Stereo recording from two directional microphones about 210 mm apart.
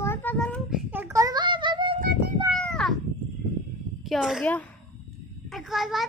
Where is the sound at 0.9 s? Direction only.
10° right (ahead or behind).